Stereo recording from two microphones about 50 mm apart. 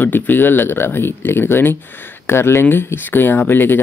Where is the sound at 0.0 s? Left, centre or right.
Left.